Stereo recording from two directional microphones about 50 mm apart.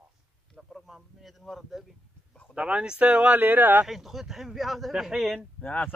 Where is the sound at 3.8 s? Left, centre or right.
Centre.